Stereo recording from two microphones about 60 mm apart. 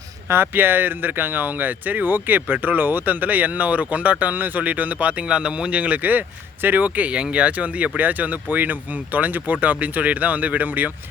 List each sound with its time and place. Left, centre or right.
0.3 s speech: right